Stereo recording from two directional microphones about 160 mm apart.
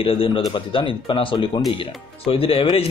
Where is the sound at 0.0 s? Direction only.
35° left (ahead or behind).